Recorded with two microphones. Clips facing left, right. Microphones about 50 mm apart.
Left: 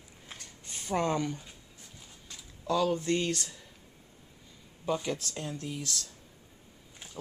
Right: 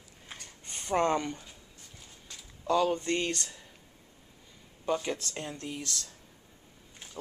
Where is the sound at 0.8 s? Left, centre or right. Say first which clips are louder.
Right 2 dB; centre.